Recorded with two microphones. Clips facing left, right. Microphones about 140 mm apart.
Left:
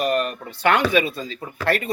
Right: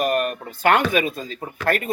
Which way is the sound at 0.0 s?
50° right (ahead or behind).